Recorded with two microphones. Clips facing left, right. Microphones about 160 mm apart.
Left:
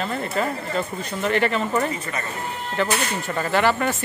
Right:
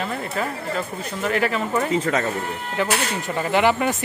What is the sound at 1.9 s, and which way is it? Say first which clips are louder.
Speech: right 8 dB; 90° right.